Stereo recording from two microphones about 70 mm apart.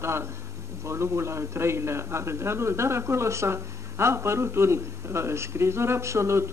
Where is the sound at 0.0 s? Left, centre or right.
Right.